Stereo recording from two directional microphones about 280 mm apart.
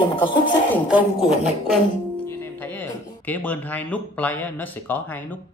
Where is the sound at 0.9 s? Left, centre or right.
Centre.